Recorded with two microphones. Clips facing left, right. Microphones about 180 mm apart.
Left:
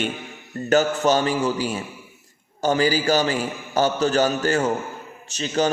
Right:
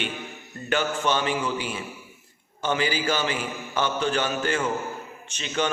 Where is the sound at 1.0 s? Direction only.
40° left (ahead or behind).